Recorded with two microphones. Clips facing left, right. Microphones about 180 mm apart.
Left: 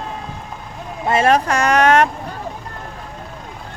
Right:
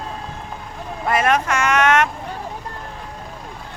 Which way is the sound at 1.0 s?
30° left (ahead or behind).